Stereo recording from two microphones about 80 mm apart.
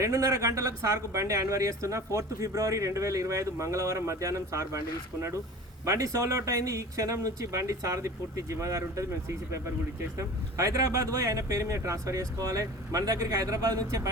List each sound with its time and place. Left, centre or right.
0.0 s speech: right
5.8 s speech: right
10.2 s speech: right